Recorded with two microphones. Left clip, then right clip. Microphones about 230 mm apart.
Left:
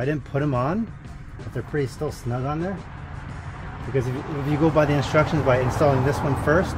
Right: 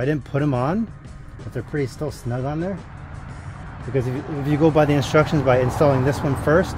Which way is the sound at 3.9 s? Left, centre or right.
Right.